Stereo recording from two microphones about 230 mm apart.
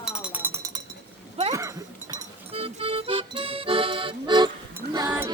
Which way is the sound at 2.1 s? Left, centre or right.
Right.